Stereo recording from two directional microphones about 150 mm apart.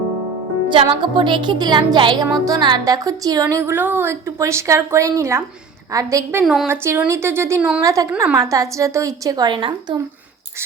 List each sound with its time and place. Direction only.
0.7 s speech: 35° right (ahead or behind)
6.4 s a woman's voice: centre (ahead or behind)
6.7 s speech: 15° right (ahead or behind); by 10.0 s 35° right (ahead or behind)